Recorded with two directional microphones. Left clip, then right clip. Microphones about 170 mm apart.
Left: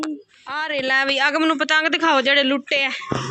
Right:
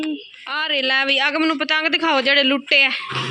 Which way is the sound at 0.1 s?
5° right (ahead or behind).